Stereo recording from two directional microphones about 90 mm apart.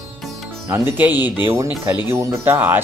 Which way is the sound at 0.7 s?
20° right (ahead or behind).